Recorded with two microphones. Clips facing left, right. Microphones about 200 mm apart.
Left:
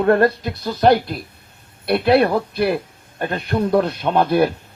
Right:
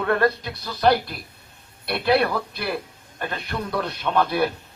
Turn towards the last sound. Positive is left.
turn(degrees=50)  # may be behind; listen again after turning